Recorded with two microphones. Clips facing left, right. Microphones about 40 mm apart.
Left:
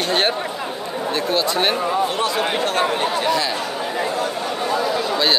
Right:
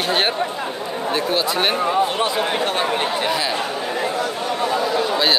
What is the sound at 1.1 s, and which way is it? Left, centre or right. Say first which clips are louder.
Speech: even; centre.